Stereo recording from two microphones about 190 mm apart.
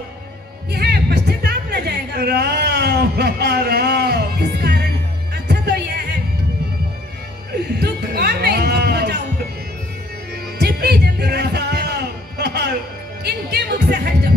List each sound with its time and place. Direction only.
0.7 s music: 60° right (ahead or behind)
7.8 s a sound: 55° right (ahead or behind)
10.6 s music: 55° right (ahead or behind)